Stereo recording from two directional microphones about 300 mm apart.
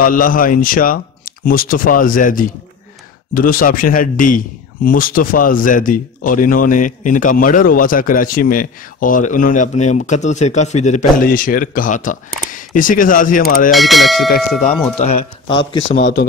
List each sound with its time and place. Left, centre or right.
0.0 s a man's voice: left
13.7 s speech: centre
15.0 s a man's voice: left
16.0 s speech: left